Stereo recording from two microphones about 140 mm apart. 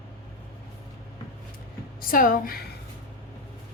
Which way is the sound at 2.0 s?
90° left.